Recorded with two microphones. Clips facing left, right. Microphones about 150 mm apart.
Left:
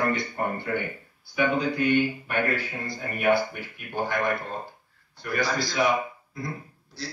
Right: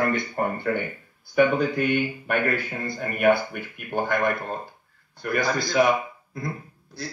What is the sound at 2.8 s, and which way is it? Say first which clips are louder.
Speech: right 4 dB; 50° right (ahead or behind).